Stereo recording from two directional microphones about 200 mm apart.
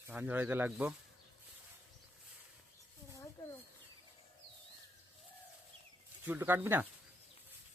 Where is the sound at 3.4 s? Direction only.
15° left (ahead or behind).